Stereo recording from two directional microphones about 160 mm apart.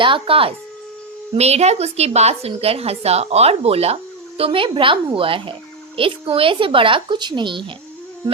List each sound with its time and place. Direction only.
0.0 s a woman's voice: 35° right (ahead or behind)